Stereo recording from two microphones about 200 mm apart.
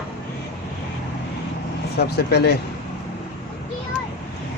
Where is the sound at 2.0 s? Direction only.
55° left (ahead or behind).